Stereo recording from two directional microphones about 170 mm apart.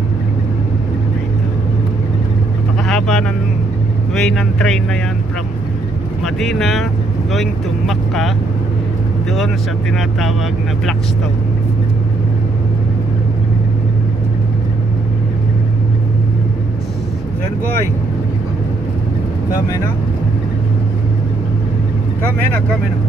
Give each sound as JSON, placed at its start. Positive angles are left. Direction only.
{"t": 2.9, "sound": "vehicle", "side_deg": 5}
{"t": 4.1, "sound": "speech", "side_deg": 0}
{"t": 6.2, "sound": "speech", "side_deg": 0}